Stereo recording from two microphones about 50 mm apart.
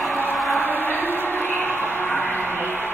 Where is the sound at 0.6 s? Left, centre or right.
Left.